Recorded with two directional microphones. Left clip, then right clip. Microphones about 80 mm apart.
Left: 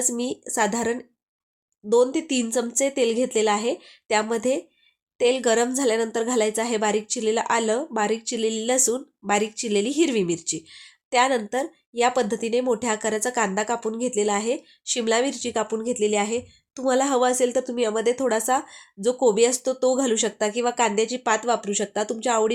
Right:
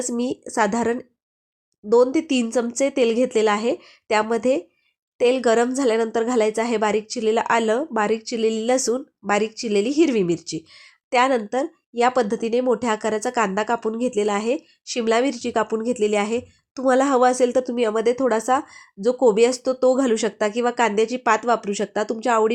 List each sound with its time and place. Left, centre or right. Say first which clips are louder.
0.0 s speech: right 2 dB; right